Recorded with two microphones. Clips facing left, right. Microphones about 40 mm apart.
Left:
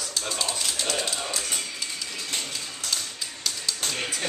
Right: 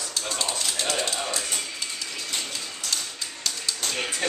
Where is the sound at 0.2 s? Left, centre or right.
Centre.